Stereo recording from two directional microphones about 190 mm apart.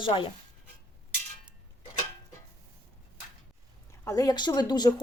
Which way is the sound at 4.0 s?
15° left (ahead or behind).